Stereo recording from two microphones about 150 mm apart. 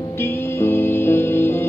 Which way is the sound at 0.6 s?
15° left (ahead or behind).